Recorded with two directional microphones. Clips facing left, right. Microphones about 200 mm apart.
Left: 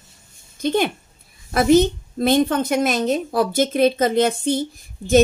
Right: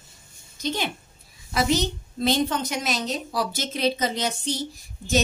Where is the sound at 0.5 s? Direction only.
55° left (ahead or behind).